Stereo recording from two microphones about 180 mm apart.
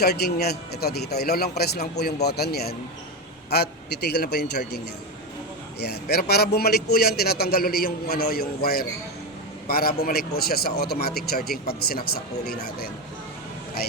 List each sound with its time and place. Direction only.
0.0 s a man's voice: 60° left (ahead or behind)
5.8 s a man's voice: 60° left (ahead or behind)